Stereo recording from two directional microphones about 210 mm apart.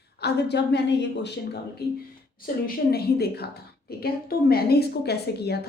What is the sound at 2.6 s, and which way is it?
A woman's voice, 50° left (ahead or behind).